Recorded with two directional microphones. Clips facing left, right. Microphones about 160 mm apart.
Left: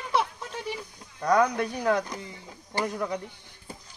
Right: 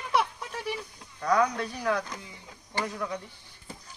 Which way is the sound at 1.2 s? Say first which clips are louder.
Left 2 dB; 40° left (ahead or behind).